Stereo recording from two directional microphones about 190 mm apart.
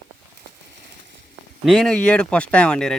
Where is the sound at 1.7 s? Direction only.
Centre (ahead or behind).